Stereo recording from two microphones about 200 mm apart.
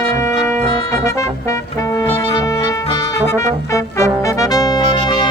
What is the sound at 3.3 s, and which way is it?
Trumpet, 15° left (ahead or behind).